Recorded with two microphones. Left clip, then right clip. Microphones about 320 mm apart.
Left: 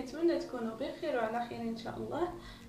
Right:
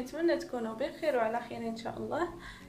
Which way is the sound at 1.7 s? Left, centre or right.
Right.